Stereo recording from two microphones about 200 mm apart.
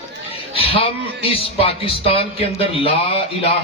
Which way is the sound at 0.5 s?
30° left (ahead or behind).